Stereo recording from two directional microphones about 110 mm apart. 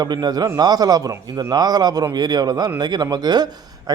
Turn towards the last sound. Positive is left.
turn(degrees=-40)  # may be behind; listen again after turning